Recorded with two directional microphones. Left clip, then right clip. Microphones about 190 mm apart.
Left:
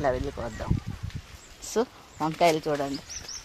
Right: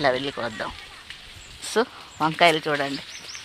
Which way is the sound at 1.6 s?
10° right (ahead or behind).